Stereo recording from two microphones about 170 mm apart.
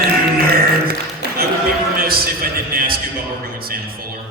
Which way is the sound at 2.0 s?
60° right (ahead or behind).